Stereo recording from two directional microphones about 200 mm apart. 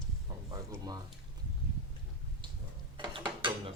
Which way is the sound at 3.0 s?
25° right (ahead or behind).